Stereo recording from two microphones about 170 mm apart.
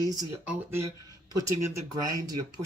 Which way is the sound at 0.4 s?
10° right (ahead or behind).